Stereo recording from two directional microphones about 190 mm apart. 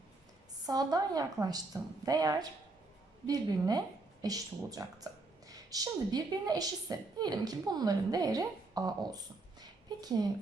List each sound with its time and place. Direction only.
0.6 s a woman's voice: 20° right (ahead or behind)